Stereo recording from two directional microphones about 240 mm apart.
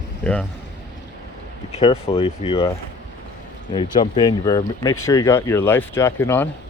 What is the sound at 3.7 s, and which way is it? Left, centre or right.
Speech, centre.